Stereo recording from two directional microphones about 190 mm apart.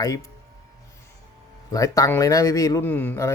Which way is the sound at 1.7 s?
15° left (ahead or behind).